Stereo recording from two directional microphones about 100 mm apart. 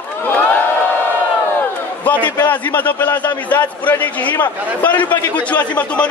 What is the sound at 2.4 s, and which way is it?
A man's voice, 15° left (ahead or behind).